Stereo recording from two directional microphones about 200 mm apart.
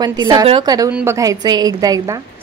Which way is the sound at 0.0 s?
20° right (ahead or behind).